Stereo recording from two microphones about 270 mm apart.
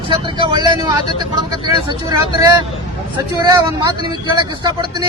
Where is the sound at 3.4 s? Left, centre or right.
Centre.